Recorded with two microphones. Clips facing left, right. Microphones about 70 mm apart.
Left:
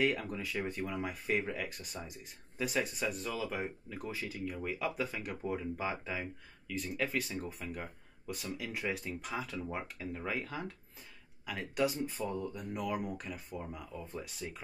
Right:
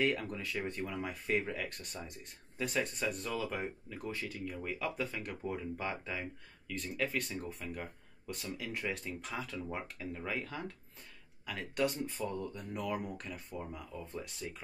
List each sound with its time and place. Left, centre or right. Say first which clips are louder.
0.0 s speech: left 1 dB; centre